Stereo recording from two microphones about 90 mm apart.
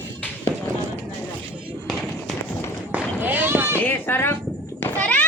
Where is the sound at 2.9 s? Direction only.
20° right (ahead or behind).